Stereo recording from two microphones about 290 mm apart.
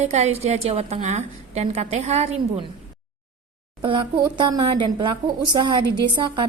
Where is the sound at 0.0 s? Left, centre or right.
Right.